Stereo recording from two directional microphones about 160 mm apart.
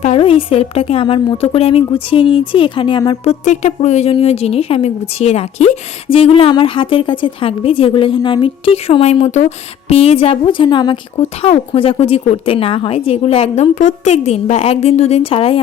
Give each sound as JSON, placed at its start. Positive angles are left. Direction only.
{"t": 0.0, "sound": "a woman's voice", "side_deg": 40}
{"t": 3.2, "sound": "a woman's voice", "side_deg": 45}
{"t": 11.2, "sound": "a woman's voice", "side_deg": 40}